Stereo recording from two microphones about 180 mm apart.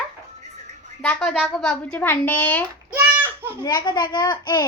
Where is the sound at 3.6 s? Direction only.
20° left (ahead or behind).